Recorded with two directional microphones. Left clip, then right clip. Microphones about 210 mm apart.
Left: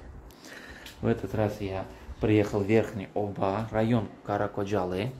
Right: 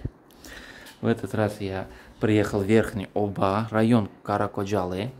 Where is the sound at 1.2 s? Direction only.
35° right (ahead or behind).